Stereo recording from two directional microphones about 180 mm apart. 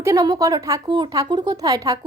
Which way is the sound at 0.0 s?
20° right (ahead or behind).